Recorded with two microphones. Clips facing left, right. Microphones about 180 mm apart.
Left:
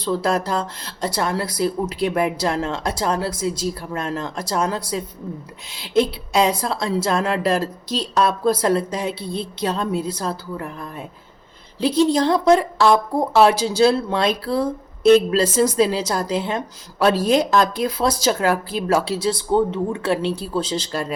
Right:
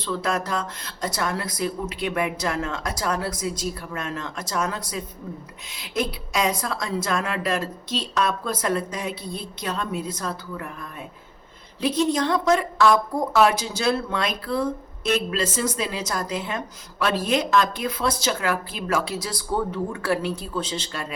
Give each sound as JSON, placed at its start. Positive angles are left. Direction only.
{"t": 0.0, "sound": "a woman's voice", "side_deg": 35}